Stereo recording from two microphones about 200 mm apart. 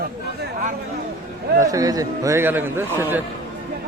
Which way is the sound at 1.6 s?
15° right (ahead or behind).